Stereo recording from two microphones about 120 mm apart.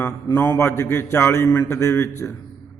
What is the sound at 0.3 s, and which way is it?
A man's voice, 20° left (ahead or behind).